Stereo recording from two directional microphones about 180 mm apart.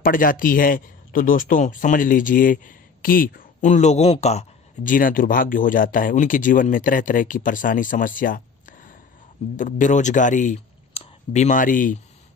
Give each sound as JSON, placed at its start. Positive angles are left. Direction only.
{"t": 0.0, "sound": "speech", "side_deg": 50}